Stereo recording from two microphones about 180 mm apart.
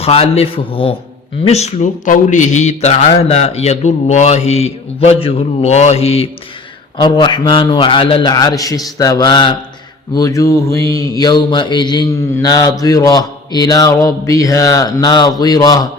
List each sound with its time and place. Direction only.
0.0 s speech: 35° left (ahead or behind)
7.0 s mantra: 25° left (ahead or behind)